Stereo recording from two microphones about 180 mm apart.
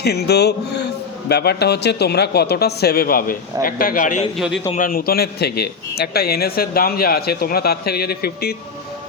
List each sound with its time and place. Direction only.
0.0 s a man's voice: 65° left (ahead or behind); by 4.3 s 45° left (ahead or behind)
4.4 s a man's voice: centre (ahead or behind)
4.7 s a man's voice: 50° left (ahead or behind)